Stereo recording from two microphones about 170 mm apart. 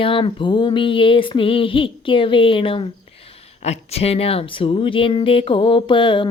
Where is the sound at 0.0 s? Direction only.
30° left (ahead or behind).